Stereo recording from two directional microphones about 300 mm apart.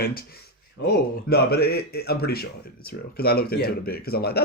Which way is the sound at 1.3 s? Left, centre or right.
Left.